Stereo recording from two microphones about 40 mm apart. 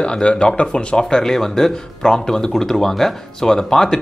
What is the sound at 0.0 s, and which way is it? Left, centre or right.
Speech, left.